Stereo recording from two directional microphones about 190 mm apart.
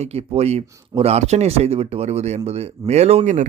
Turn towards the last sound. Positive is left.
turn(degrees=-40)  # may be behind; listen again after turning